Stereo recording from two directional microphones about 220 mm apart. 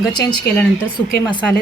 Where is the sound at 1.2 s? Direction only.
20° left (ahead or behind).